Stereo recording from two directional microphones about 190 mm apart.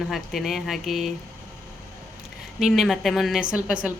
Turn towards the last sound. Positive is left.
turn(degrees=-5)  # may be behind; listen again after turning